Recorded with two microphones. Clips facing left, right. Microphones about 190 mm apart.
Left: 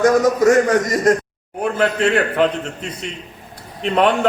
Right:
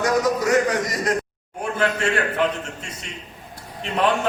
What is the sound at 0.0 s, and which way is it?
A man's voice, 50° left (ahead or behind).